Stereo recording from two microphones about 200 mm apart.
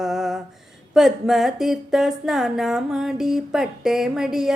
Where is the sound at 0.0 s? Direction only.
Centre (ahead or behind).